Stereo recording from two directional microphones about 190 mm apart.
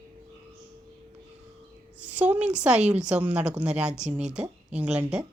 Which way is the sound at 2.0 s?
5° right (ahead or behind).